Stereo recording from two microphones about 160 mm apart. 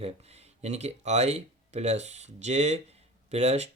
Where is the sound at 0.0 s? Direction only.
40° right (ahead or behind).